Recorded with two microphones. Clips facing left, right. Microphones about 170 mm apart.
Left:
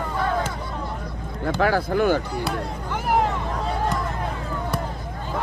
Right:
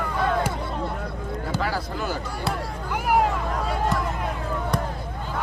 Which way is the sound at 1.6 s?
55° left (ahead or behind).